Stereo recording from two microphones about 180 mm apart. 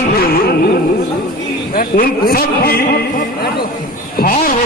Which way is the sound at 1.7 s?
55° left (ahead or behind).